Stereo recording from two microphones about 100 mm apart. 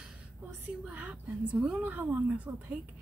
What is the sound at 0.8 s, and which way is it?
A woman's voice, 15° right (ahead or behind).